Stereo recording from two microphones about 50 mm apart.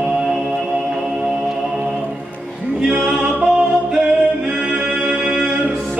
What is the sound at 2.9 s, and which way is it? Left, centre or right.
Music, right.